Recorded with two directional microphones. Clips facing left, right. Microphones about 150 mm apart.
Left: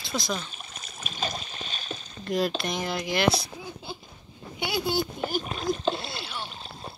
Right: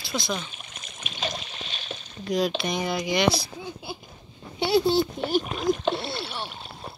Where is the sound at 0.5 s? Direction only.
35° left (ahead or behind).